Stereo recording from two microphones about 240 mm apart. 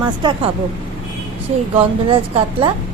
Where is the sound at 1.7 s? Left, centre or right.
Right.